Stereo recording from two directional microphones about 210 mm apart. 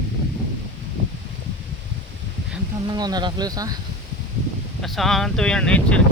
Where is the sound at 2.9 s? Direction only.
20° right (ahead or behind).